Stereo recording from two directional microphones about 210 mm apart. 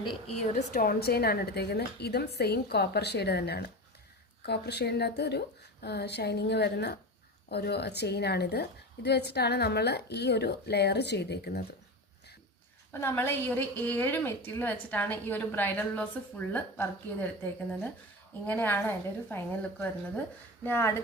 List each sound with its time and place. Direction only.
0.0 s a woman's voice: 25° left (ahead or behind); by 11.6 s 50° left (ahead or behind)
12.9 s a woman's voice: 10° left (ahead or behind)
20.7 s a woman's voice: 10° left (ahead or behind)